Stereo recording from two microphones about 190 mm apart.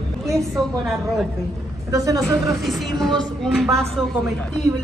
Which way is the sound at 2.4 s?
Centre (ahead or behind).